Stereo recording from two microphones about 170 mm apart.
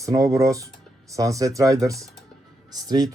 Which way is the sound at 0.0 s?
20° right (ahead or behind).